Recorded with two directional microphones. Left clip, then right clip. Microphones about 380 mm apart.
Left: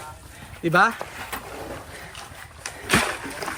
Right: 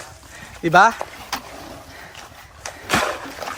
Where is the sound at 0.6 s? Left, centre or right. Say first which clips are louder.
Right 5 dB; centre.